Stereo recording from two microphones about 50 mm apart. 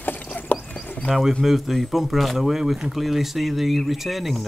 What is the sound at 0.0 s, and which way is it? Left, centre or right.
Ratchet, left.